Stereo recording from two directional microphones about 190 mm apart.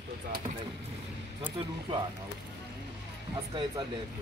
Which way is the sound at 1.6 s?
30° right (ahead or behind).